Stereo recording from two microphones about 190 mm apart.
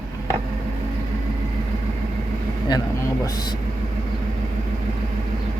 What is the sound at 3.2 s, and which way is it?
Vehicle, 20° left (ahead or behind).